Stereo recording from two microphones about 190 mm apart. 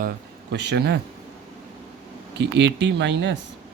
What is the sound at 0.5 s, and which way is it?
Speech, 65° right (ahead or behind).